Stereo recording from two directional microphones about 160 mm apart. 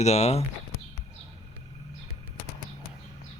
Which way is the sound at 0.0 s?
45° left (ahead or behind).